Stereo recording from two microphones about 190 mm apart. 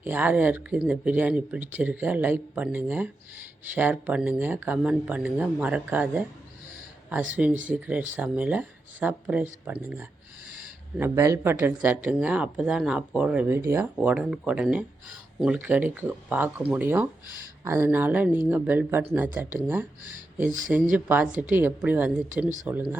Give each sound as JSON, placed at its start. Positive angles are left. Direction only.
{"t": 0.0, "sound": "speech", "side_deg": -10}
{"t": 7.7, "sound": "speech", "side_deg": -5}
{"t": 10.5, "sound": "a sound", "side_deg": -10}
{"t": 11.6, "sound": "speech", "side_deg": -10}
{"t": 20.5, "sound": "speech", "side_deg": -40}
{"t": 20.9, "sound": "speech", "side_deg": -10}